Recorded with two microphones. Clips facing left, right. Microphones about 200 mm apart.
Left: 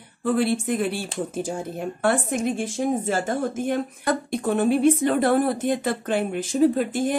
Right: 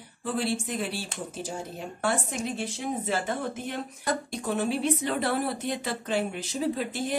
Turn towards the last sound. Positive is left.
turn(degrees=50)  # may be behind; listen again after turning